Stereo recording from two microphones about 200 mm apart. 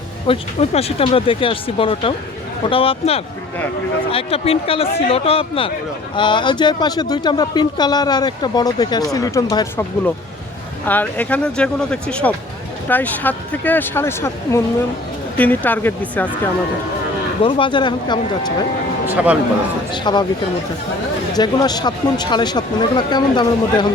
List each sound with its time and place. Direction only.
0.3 s speech: 30° left (ahead or behind)
10.8 s speech: 10° left (ahead or behind)
17.4 s speech: 25° left (ahead or behind)
19.1 s speech: 5° right (ahead or behind)
19.9 s speech: 20° left (ahead or behind)
21.3 s speech: 20° left (ahead or behind)